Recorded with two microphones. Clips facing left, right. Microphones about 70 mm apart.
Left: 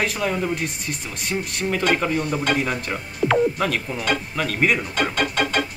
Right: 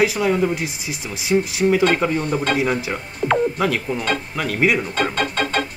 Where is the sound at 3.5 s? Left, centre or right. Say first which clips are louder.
Right 3 dB; centre.